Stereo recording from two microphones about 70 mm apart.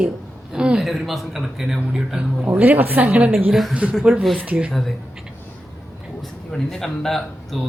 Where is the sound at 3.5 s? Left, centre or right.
Centre.